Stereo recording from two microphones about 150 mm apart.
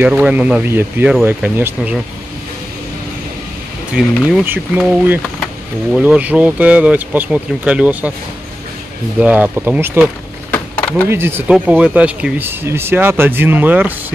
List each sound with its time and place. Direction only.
0.0 s speech: 10° right (ahead or behind)
4.0 s speech: centre (ahead or behind)
9.2 s speech: 10° right (ahead or behind)
10.5 s a sound: 10° left (ahead or behind)
11.1 s speech: 15° right (ahead or behind)